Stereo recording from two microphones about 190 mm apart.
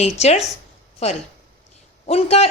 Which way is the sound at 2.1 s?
35° left (ahead or behind).